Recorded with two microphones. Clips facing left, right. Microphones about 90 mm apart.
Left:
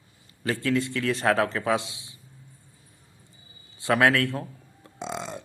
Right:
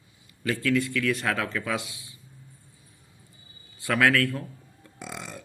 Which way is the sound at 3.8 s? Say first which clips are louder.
Left 1 dB; 25° left (ahead or behind).